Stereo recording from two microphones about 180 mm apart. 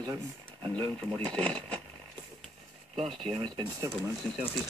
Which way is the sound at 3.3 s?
25° right (ahead or behind).